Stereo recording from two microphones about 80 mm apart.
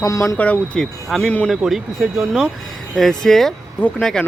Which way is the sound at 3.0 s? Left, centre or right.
Centre.